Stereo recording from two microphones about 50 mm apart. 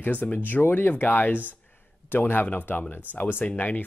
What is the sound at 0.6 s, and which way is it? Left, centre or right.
Speech, left.